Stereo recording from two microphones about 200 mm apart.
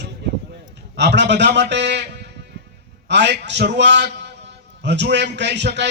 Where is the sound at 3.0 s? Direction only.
60° right (ahead or behind).